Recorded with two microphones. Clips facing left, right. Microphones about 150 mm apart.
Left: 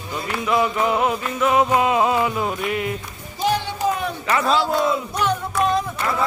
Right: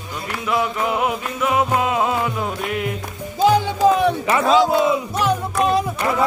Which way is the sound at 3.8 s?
90° right.